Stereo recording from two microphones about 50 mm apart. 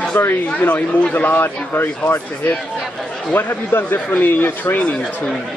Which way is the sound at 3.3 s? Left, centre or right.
Left.